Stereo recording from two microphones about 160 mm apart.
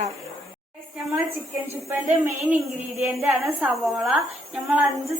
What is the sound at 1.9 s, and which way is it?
A woman's voice, 15° right (ahead or behind).